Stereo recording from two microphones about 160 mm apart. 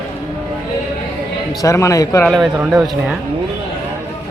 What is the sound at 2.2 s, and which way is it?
Speech, centre (ahead or behind).